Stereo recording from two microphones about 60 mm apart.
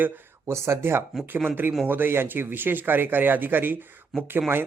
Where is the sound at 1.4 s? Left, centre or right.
Right.